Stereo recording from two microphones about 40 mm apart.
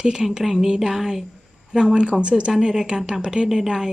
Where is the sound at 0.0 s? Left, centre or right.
Right.